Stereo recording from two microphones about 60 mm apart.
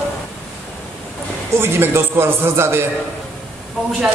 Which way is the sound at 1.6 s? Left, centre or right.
Right.